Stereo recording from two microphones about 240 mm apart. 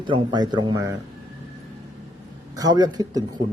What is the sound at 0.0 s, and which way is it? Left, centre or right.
Speech, centre.